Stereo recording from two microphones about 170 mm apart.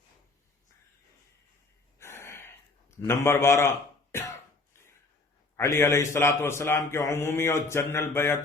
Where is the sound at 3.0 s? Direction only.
15° left (ahead or behind).